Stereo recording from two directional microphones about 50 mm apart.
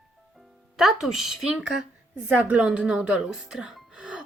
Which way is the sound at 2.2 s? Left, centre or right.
Right.